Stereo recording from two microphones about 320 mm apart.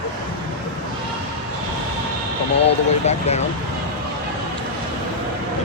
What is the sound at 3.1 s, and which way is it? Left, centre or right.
Speech, centre.